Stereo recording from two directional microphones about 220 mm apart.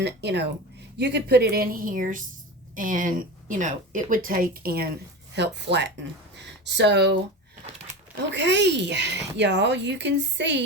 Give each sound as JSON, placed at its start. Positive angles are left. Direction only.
{"t": 0.0, "sound": "a woman's voice", "side_deg": -50}
{"t": 8.3, "sound": "speech", "side_deg": -50}